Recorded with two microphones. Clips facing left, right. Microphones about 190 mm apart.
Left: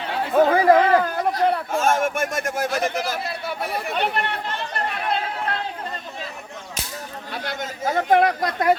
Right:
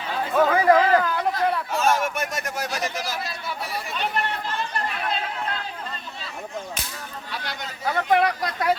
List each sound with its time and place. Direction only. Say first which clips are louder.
0.3 s speech: left 3 dB; 35° left (ahead or behind)
1.0 s speech: left 2 dB; 50° left (ahead or behind)
7.3 s speech: left 5 dB; 45° left (ahead or behind)